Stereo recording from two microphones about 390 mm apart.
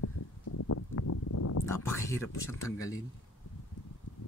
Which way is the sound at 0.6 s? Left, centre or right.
Left.